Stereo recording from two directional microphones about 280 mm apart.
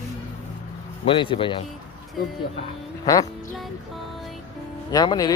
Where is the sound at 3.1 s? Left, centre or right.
Centre.